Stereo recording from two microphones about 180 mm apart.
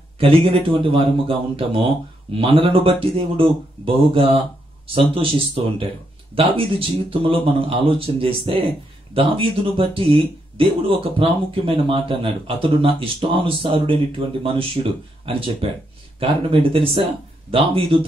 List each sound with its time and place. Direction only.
0.2 s speech: 30° right (ahead or behind)